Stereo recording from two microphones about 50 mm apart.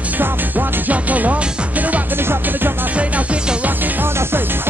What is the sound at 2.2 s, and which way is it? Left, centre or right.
Music, right.